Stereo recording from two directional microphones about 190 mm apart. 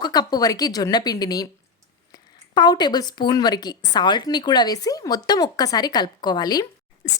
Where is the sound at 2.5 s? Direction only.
20° left (ahead or behind).